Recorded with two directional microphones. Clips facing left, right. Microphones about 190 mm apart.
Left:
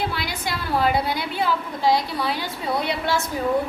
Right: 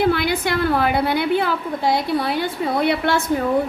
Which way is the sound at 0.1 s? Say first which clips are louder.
Right 9 dB; 60° right (ahead or behind).